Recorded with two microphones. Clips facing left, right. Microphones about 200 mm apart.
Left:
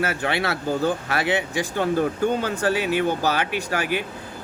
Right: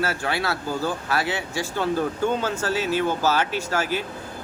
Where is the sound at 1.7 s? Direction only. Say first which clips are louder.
Left 2 dB; 50° left (ahead or behind).